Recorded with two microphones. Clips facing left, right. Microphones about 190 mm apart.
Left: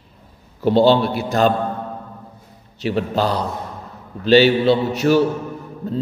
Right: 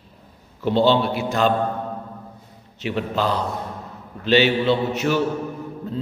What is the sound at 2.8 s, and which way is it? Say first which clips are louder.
A man's voice: left 3 dB; 35° left (ahead or behind).